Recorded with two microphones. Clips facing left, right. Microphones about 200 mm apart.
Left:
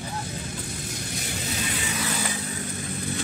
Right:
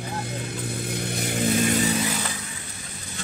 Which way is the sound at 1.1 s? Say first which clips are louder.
Right 10 dB; 55° right (ahead or behind).